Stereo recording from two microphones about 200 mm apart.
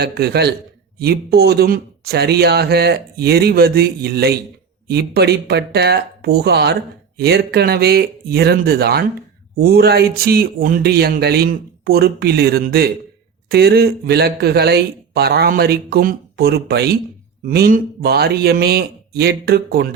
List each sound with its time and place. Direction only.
0.0 s a man's voice: 55° right (ahead or behind)